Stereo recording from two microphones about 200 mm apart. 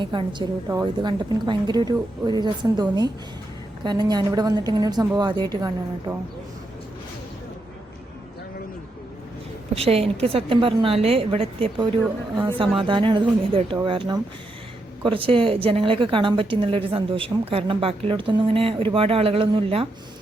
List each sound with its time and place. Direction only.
0.0 s a woman's voice: 25° right (ahead or behind)
9.7 s a woman's voice: 30° right (ahead or behind)
12.9 s a woman's voice: 25° right (ahead or behind)